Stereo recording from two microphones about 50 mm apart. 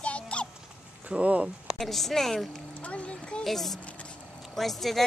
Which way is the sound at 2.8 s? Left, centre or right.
Left.